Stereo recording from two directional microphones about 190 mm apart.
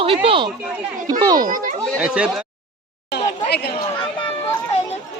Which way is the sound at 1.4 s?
45° right (ahead or behind).